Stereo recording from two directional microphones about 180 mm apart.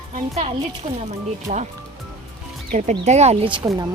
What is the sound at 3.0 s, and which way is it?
Speech, 35° right (ahead or behind).